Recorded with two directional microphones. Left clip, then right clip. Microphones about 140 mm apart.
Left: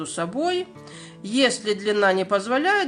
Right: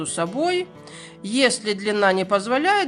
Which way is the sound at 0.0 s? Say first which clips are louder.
Right 2 dB; 35° right (ahead or behind).